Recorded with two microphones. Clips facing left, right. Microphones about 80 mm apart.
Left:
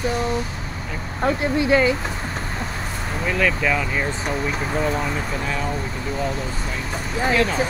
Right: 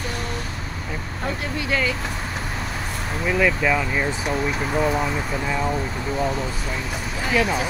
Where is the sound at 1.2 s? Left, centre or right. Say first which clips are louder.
Left 9 dB; left.